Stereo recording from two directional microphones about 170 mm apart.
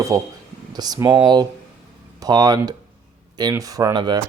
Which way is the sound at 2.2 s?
20° right (ahead or behind).